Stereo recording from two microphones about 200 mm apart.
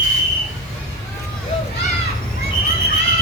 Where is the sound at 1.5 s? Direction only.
30° left (ahead or behind).